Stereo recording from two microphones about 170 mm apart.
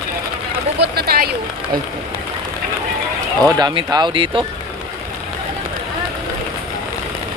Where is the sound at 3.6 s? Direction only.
25° right (ahead or behind).